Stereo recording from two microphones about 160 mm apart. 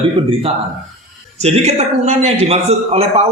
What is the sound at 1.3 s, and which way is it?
A man's voice, 40° right (ahead or behind).